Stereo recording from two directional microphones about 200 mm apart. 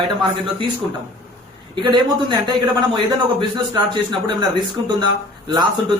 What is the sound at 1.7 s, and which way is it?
Speech, 20° right (ahead or behind).